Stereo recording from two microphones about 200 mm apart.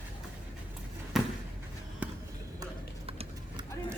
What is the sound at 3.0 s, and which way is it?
Horse, 30° right (ahead or behind).